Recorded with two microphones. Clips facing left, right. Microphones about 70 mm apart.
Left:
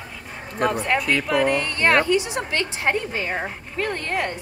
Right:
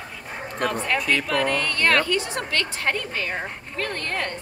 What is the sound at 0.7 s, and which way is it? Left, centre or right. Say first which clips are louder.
Speech: left 3 dB; centre.